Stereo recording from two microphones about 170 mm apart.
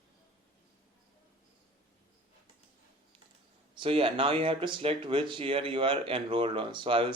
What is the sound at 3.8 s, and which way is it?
Speech, 30° right (ahead or behind).